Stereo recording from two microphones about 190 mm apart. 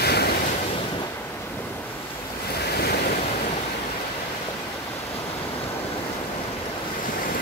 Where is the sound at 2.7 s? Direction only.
55° left (ahead or behind).